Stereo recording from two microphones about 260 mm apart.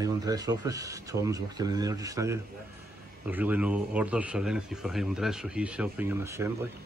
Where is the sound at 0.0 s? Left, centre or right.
Centre.